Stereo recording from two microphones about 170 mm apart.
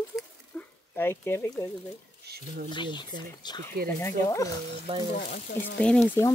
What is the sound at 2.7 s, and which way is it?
Speech, 25° left (ahead or behind).